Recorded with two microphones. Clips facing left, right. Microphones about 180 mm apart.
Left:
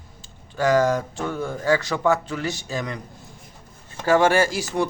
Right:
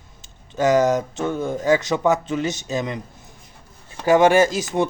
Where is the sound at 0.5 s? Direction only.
20° right (ahead or behind).